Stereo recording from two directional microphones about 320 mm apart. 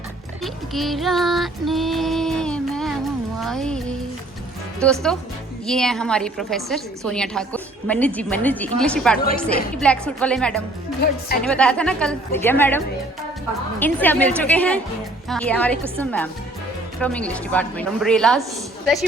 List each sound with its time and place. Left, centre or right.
0.4 s female singing: centre
3.4 s music: centre
4.8 s a woman's voice: centre
9.1 s a woman's voice: left
9.8 s a woman's voice: centre
11.0 s a woman's voice: left
11.5 s a woman's voice: centre